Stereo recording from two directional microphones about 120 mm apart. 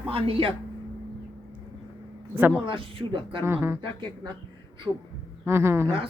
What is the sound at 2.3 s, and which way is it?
Speech, 15° right (ahead or behind).